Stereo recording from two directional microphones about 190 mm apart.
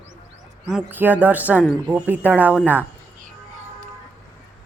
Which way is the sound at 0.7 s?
10° right (ahead or behind).